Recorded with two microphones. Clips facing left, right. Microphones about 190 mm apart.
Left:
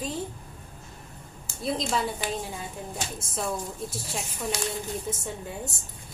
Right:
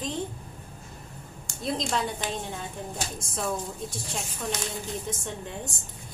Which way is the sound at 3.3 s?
Centre (ahead or behind).